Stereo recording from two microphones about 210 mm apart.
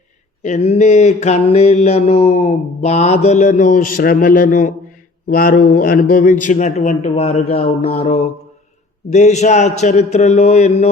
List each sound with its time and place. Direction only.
0.4 s mantra: 30° left (ahead or behind)